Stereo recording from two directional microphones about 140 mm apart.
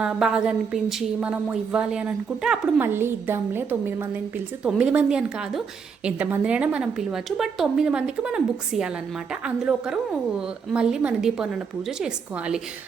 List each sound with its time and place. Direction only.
0.0 s a woman's voice: 5° right (ahead or behind)
2.8 s a woman's voice: 15° right (ahead or behind)